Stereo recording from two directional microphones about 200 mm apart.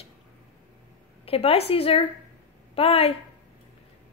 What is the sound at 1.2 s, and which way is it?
Speech, 30° left (ahead or behind).